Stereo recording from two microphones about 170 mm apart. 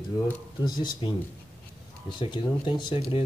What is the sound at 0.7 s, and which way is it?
Speech, 25° left (ahead or behind).